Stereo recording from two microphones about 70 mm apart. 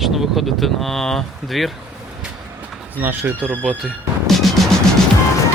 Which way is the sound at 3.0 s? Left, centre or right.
Right.